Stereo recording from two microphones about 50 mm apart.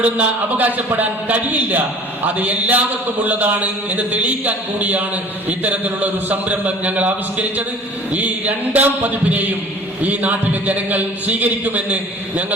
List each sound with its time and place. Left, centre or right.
0.0 s speech: right